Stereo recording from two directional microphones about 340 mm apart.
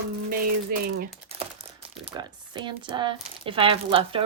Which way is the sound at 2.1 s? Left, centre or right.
Centre.